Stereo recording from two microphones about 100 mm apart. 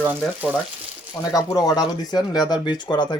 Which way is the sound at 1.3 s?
35° left (ahead or behind).